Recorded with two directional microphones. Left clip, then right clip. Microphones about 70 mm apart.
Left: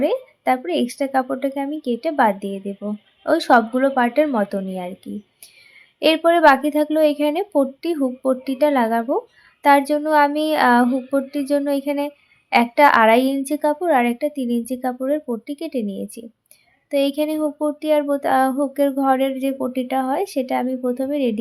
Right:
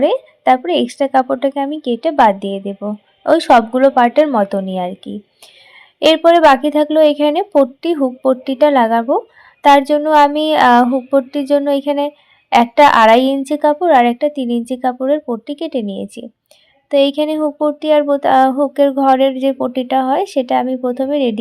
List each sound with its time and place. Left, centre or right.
0.0 s speech: right
6.0 s speech: right